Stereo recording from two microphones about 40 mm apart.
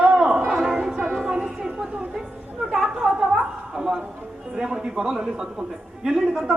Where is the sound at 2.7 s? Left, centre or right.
Centre.